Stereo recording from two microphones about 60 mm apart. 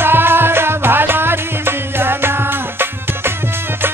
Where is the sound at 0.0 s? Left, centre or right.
Right.